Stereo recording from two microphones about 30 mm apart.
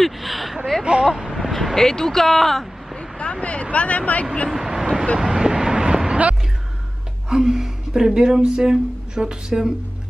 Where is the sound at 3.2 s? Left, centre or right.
Left.